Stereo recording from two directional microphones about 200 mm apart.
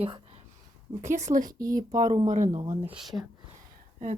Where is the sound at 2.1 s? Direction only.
35° right (ahead or behind).